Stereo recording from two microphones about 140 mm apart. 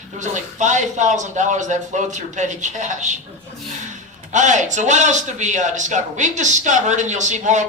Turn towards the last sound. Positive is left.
turn(degrees=-60)  # may be behind; listen again after turning